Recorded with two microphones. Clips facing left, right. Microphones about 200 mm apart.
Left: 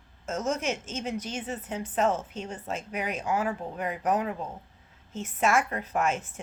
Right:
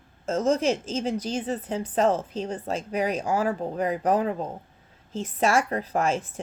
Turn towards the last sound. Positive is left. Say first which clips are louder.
# right 3 dB
turn(degrees=-30)  # may be behind; listen again after turning